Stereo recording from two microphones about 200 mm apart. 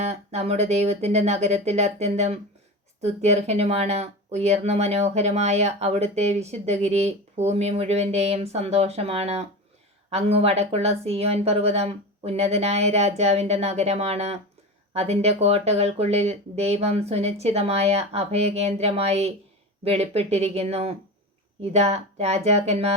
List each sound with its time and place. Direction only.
0.0 s speech: 35° right (ahead or behind)